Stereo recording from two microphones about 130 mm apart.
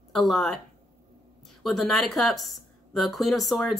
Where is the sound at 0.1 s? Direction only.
5° left (ahead or behind).